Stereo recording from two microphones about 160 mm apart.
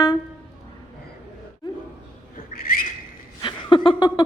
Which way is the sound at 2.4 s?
65° left (ahead or behind).